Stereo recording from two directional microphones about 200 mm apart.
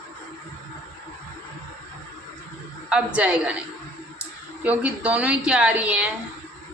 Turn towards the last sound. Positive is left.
turn(degrees=-5)  # may be behind; listen again after turning